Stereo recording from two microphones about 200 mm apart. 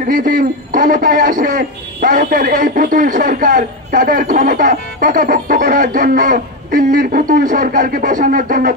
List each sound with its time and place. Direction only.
0.1 s a man's voice: 45° right (ahead or behind)